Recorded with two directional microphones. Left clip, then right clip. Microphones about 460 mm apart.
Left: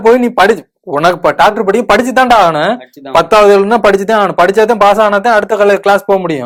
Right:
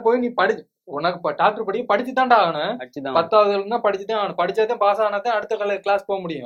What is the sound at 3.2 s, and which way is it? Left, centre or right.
Speech, left.